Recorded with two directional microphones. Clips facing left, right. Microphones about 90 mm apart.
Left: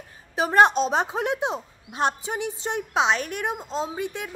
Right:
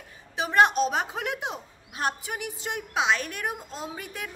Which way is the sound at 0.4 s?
35° left (ahead or behind).